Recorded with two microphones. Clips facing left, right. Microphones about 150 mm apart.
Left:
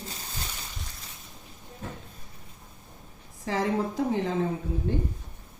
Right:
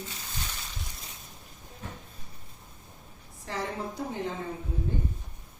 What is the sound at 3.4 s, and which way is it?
Speech, 90° left.